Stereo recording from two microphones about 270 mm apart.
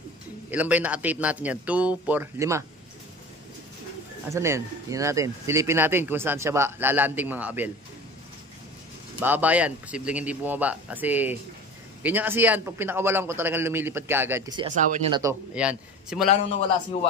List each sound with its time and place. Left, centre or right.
0.5 s speech: centre
4.3 s speech: centre
9.2 s speech: centre
14.6 s speech: right
15.0 s speech: centre
15.5 s speech: centre